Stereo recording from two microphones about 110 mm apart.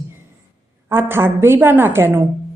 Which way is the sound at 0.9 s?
20° right (ahead or behind).